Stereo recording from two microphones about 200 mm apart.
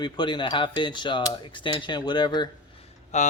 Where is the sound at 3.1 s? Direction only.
35° left (ahead or behind).